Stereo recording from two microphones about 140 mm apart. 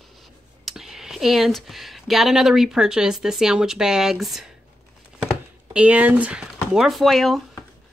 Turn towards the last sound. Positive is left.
turn(degrees=0)  # may be behind; listen again after turning